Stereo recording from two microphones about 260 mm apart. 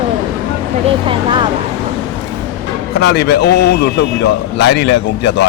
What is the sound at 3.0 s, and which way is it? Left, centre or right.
Speech, left.